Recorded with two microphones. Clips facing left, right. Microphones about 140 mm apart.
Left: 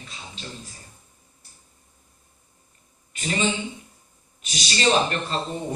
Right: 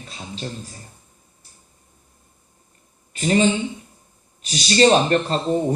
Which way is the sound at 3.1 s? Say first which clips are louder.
Right 9 dB; 40° right (ahead or behind).